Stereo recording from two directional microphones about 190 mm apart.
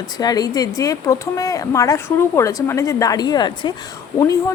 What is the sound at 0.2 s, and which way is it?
A woman's voice, 20° left (ahead or behind).